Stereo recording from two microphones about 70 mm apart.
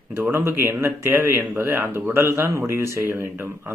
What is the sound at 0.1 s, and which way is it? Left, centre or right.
Speech, right.